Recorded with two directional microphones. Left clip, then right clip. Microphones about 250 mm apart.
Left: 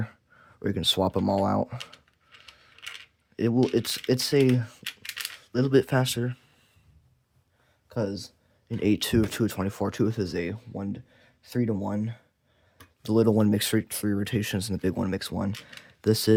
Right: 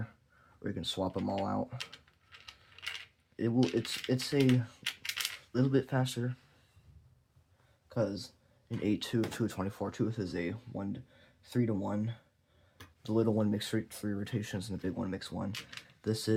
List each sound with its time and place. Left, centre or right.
0.0 s speech: left
1.8 s a sound: centre
3.3 s speech: left
4.8 s coin: centre
5.5 s speech: left
7.9 s speech: left